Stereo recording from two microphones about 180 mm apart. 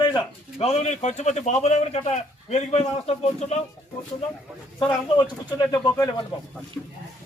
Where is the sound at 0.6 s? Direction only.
40° left (ahead or behind).